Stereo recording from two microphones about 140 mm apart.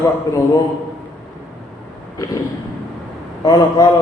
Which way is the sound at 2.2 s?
25° left (ahead or behind).